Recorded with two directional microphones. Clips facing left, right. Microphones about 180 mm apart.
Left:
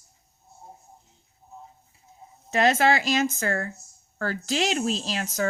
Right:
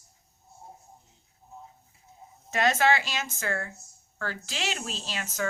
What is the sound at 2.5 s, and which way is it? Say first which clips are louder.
Speech: left 3 dB; 35° left (ahead or behind).